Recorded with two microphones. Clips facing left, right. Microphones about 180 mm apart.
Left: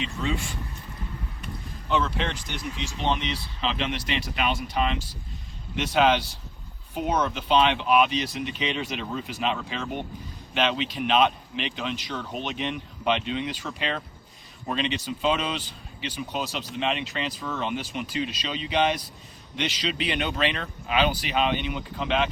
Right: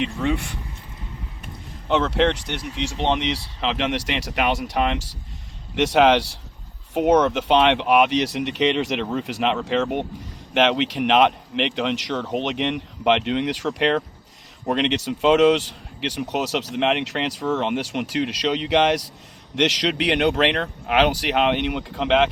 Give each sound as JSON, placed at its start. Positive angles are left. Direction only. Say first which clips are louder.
{"t": 0.0, "sound": "speech", "louder": "right 6 dB", "side_deg": -60}
{"t": 1.9, "sound": "speech", "louder": "right 7 dB", "side_deg": -70}